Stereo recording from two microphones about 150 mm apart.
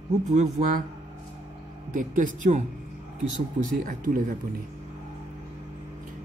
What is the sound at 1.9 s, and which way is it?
Speech, 60° right (ahead or behind).